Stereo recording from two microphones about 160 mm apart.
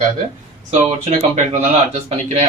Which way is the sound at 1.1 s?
50° right (ahead or behind).